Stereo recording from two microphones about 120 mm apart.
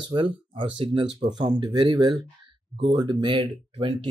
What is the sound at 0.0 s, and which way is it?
Speech, 45° right (ahead or behind).